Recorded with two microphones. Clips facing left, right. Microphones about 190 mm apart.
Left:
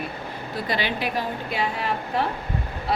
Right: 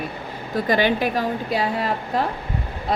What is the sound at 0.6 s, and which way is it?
A woman's voice, 45° right (ahead or behind).